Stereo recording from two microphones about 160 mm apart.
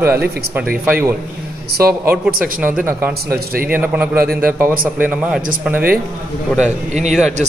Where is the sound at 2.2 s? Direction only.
65° right (ahead or behind).